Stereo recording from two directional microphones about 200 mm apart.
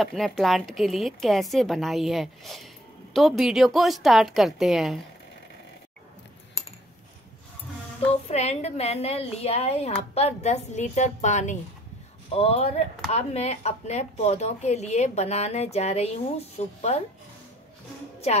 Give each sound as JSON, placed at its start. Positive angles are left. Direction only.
{"t": 0.0, "sound": "a woman's voice", "side_deg": 0}
{"t": 8.3, "sound": "speech", "side_deg": 35}